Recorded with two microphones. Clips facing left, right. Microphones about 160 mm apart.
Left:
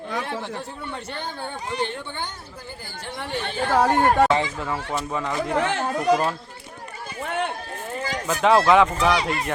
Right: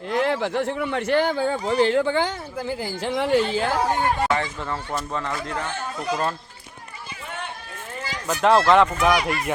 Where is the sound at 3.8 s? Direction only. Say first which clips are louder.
Left 4 dB; 65° left (ahead or behind).